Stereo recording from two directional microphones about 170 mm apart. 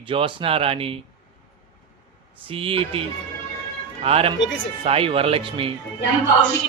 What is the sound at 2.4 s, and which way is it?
Speech, 35° right (ahead or behind).